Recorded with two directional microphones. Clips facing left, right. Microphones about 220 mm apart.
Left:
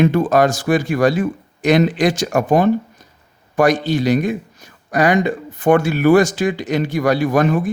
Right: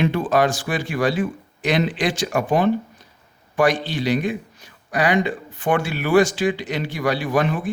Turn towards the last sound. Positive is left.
turn(degrees=45)  # may be behind; listen again after turning